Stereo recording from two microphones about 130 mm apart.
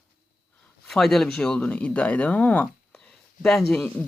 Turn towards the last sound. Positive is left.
turn(degrees=5)  # may be behind; listen again after turning